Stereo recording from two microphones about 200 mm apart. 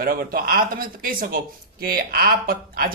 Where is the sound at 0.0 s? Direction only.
45° right (ahead or behind).